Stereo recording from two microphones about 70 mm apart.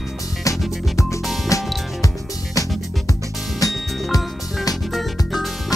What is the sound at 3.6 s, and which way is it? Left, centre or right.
Music, left.